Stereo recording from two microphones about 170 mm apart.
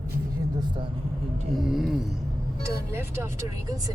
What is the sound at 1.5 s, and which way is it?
Speech, centre (ahead or behind).